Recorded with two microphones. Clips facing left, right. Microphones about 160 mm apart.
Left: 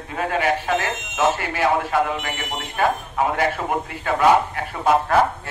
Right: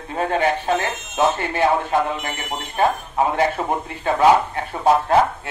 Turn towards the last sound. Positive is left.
turn(degrees=-30)  # may be behind; listen again after turning